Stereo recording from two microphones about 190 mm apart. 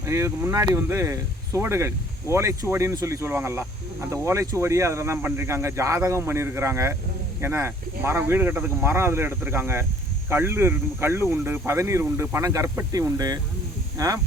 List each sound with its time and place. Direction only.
0.0 s speech: 15° right (ahead or behind)